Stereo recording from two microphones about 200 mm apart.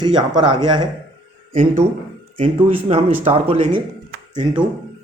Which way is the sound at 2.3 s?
35° right (ahead or behind).